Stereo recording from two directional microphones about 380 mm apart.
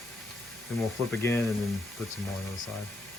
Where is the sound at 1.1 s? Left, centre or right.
Centre.